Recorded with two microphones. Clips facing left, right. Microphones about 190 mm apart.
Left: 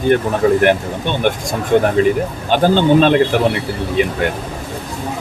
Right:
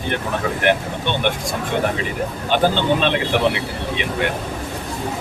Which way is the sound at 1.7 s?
50° left (ahead or behind).